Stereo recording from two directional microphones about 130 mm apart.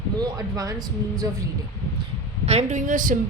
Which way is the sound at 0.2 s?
30° right (ahead or behind).